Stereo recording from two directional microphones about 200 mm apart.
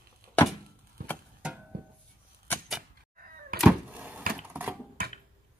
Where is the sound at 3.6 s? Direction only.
10° right (ahead or behind).